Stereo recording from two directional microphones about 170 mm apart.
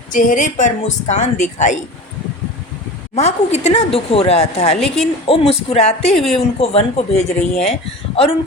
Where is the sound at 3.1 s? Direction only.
40° left (ahead or behind).